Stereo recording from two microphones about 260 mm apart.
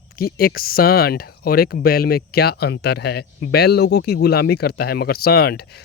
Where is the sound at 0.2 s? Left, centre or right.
Left.